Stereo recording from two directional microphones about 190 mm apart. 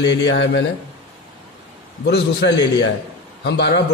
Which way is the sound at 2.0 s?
65° left (ahead or behind).